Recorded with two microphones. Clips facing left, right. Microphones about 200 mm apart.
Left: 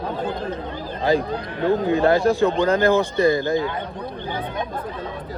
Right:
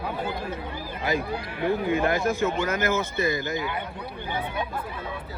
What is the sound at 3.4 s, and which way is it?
Speech, 20° right (ahead or behind).